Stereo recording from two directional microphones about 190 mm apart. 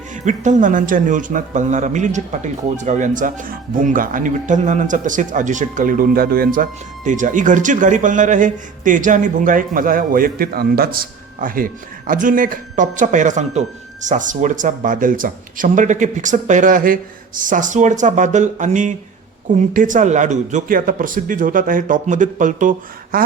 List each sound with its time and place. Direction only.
0.3 s speech: 40° right (ahead or behind)